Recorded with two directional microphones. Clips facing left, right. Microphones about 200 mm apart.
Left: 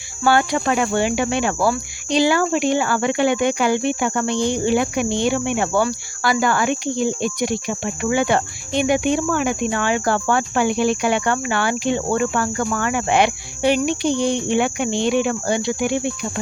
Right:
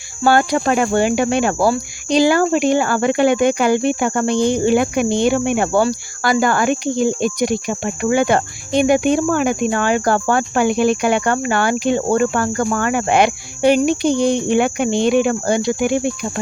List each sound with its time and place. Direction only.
0.3 s cricket: 45° right (ahead or behind)